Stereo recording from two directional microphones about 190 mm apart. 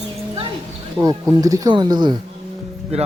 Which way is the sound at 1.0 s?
20° right (ahead or behind).